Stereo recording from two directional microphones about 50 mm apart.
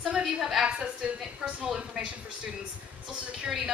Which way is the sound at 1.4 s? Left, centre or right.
Centre.